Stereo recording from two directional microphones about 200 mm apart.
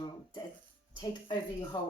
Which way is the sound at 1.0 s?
20° left (ahead or behind).